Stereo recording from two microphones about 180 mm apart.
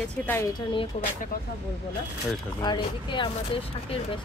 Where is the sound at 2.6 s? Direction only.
25° left (ahead or behind).